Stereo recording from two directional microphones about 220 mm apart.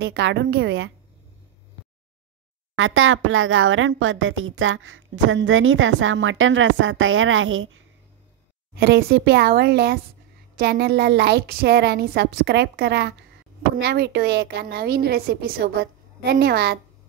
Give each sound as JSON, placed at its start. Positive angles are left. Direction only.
{"t": 0.0, "sound": "a woman's voice", "side_deg": -50}
{"t": 2.7, "sound": "a woman's voice", "side_deg": -65}
{"t": 8.7, "sound": "a woman's voice", "side_deg": -45}